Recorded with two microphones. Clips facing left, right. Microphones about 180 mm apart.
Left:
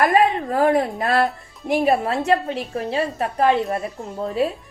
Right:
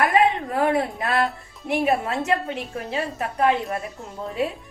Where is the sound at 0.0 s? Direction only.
35° left (ahead or behind).